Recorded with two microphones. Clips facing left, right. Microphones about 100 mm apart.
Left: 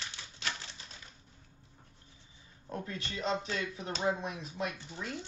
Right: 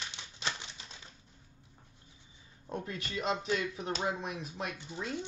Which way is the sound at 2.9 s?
30° left (ahead or behind).